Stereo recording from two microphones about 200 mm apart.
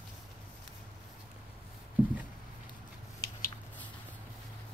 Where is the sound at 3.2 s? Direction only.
50° left (ahead or behind).